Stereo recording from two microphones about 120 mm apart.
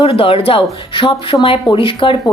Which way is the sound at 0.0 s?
50° left (ahead or behind).